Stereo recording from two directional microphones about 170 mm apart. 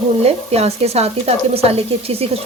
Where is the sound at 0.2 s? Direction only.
40° right (ahead or behind).